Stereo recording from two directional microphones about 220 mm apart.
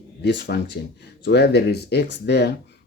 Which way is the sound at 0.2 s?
50° left (ahead or behind).